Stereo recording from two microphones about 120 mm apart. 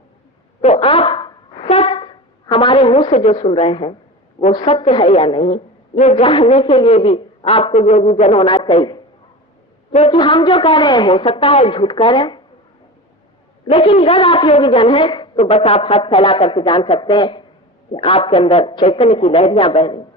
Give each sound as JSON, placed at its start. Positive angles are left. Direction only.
{"t": 0.6, "sound": "a sound", "side_deg": 60}
{"t": 3.2, "sound": "a man's voice", "side_deg": 50}
{"t": 5.5, "sound": "speech", "side_deg": 70}
{"t": 6.2, "sound": "a woman's voice", "side_deg": 50}
{"t": 8.5, "sound": "a woman's voice", "side_deg": 45}
{"t": 10.1, "sound": "a woman's voice", "side_deg": 40}
{"t": 11.1, "sound": "a man's voice", "side_deg": 55}
{"t": 13.7, "sound": "a man's voice", "side_deg": 55}
{"t": 15.4, "sound": "a man's voice", "side_deg": 60}